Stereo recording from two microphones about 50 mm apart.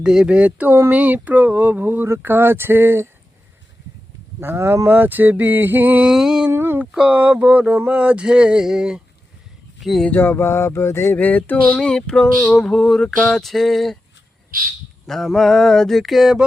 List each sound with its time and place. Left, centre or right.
0.0 s speech: centre
0.3 s speech: right
4.4 s speech: right
4.9 s speech: right
6.1 s a sound: centre
6.5 s speech: right
7.0 s speech: right; by 9.0 s centre
10.1 s a sound: left
10.3 s a sound: left
11.1 s a sound: left
11.8 s mantra: centre
13.2 s speech: centre
15.0 s speech: centre